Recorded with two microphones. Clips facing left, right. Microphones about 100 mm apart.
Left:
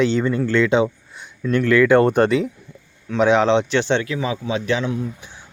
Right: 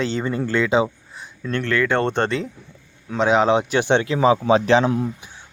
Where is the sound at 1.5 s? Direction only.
10° left (ahead or behind); by 4.1 s 15° right (ahead or behind).